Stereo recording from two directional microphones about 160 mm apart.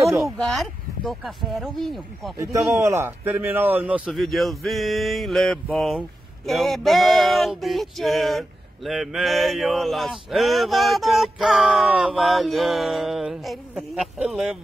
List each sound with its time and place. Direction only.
0.0 s mantra: centre (ahead or behind)
2.3 s speech: 20° right (ahead or behind)
4.0 s mantra: centre (ahead or behind)